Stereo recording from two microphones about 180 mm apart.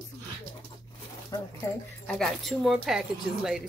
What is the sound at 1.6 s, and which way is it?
Speech, 20° left (ahead or behind).